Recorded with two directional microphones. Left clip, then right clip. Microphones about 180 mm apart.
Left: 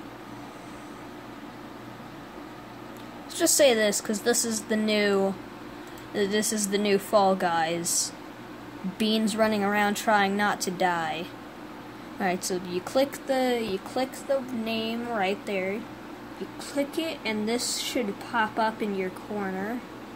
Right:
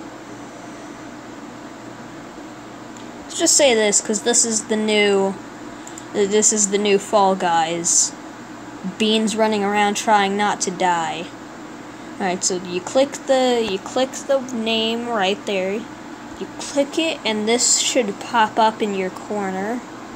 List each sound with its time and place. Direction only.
3.3 s a woman's voice: 20° left (ahead or behind); by 15.7 s centre (ahead or behind)
16.7 s speech: centre (ahead or behind)